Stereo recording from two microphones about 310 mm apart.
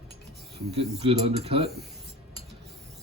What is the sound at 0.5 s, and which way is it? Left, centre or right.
Speech, centre.